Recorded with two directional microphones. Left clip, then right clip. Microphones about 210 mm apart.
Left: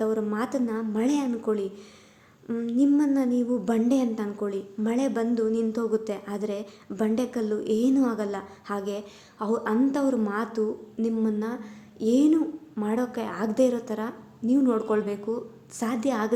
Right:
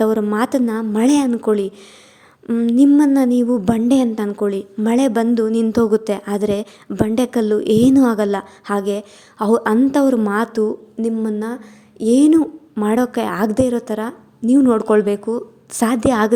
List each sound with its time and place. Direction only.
0.0 s a woman's voice: 45° right (ahead or behind)